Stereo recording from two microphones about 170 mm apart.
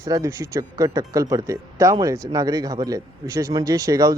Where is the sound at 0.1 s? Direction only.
20° right (ahead or behind).